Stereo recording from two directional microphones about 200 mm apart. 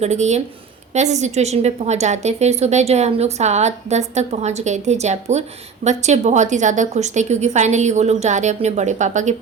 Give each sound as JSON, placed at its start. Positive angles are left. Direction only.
{"t": 0.0, "sound": "a woman's voice", "side_deg": -35}